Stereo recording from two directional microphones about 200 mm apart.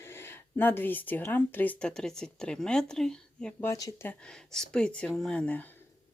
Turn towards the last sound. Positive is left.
turn(degrees=5)  # may be behind; listen again after turning